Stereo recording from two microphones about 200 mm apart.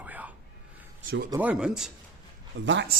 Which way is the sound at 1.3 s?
10° right (ahead or behind).